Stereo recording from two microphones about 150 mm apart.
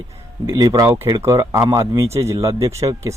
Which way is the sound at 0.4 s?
25° right (ahead or behind).